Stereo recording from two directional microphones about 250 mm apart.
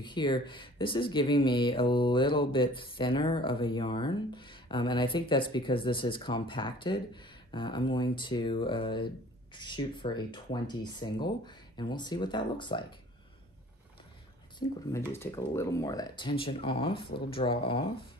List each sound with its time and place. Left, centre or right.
0.0 s speech: centre
14.9 s speech: centre